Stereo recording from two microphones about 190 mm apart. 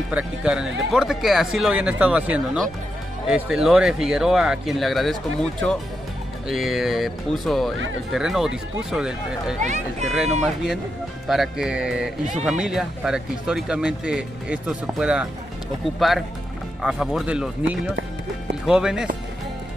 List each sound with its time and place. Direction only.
0.1 s speech: 5° right (ahead or behind)
9.6 s speech: 40° right (ahead or behind)
10.4 s speech: 5° right (ahead or behind)